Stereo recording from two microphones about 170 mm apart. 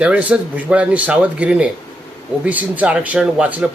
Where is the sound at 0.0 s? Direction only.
5° right (ahead or behind).